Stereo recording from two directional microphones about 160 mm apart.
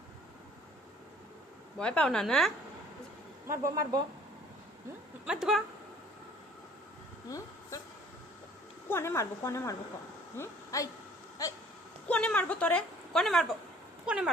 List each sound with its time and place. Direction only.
1.8 s speech: 5° left (ahead or behind)
3.5 s speech: 20° right (ahead or behind)
5.2 s speech: 5° right (ahead or behind)
7.3 s a sound: 20° left (ahead or behind)
8.9 s a woman's voice: 15° left (ahead or behind)
11.4 s a sound: 20° left (ahead or behind)
12.0 s a woman's voice: 5° left (ahead or behind)